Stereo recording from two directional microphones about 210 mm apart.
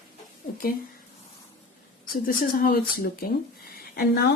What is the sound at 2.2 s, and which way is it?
A woman's voice, 45° left (ahead or behind).